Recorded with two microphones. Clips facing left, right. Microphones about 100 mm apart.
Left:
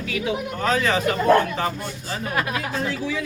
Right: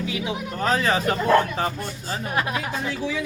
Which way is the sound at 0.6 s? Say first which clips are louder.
Even; 35° right (ahead or behind).